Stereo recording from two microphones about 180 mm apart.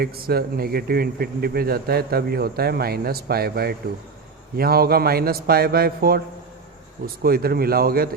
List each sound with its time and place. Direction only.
0.0 s a man's voice: 60° right (ahead or behind)